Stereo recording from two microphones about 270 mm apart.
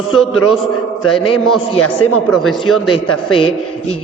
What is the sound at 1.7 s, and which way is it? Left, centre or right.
Speech, left.